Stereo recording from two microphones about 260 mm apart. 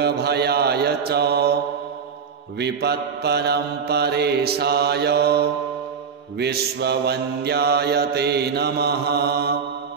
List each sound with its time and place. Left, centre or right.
0.0 s mantra: right
2.6 s mantra: right